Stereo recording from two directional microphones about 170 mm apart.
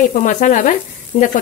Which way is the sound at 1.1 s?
35° left (ahead or behind).